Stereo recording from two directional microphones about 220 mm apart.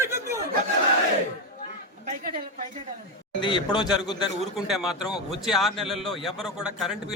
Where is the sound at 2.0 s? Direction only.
40° right (ahead or behind).